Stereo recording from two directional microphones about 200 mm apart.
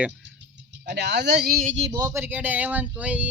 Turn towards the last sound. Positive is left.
turn(degrees=-5)  # may be behind; listen again after turning